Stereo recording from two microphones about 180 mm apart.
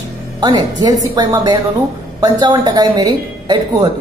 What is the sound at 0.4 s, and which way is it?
A woman's voice, 25° right (ahead or behind).